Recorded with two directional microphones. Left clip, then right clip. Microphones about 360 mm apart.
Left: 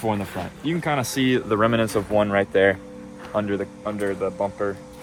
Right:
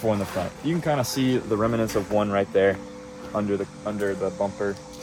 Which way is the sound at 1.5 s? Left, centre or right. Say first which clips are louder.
Left 3 dB; left.